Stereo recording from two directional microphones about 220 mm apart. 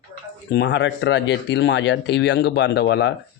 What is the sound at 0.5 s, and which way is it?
Speech, 50° left (ahead or behind).